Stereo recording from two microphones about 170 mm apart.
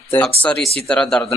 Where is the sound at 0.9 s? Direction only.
5° left (ahead or behind).